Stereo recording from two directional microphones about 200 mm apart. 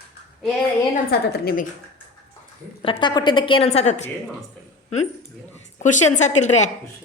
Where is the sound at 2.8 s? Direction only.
25° left (ahead or behind).